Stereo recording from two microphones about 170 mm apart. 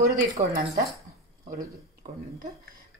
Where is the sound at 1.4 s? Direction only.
55° right (ahead or behind).